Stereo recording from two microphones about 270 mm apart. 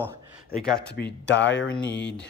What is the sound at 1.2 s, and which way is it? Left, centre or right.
Speech, left.